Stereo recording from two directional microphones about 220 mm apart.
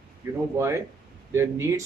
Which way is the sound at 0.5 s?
15° right (ahead or behind).